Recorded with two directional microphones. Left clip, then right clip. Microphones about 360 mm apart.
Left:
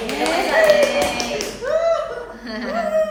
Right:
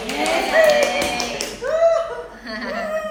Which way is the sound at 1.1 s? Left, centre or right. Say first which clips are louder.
Left 1 dB; centre.